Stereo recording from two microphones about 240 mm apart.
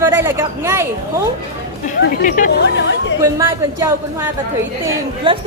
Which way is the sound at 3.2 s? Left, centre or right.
Centre.